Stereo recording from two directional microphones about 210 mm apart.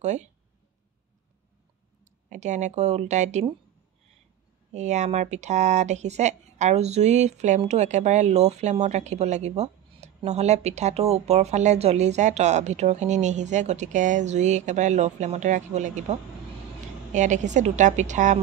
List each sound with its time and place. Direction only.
0.0 s speech: 35° right (ahead or behind)
2.2 s speech: 35° right (ahead or behind)
4.7 s speech: 35° right (ahead or behind)